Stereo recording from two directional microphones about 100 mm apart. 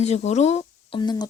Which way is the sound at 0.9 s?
45° left (ahead or behind).